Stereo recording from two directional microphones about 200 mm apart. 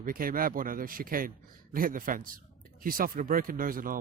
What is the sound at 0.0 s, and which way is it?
Speech, 45° right (ahead or behind).